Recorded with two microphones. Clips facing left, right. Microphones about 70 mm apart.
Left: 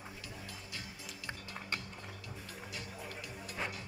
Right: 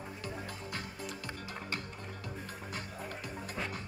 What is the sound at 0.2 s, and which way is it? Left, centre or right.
Music, right.